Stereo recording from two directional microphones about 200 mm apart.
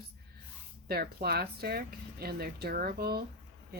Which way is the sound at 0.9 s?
50° right (ahead or behind).